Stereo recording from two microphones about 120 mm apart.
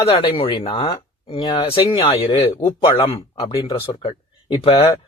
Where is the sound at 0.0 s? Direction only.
45° left (ahead or behind).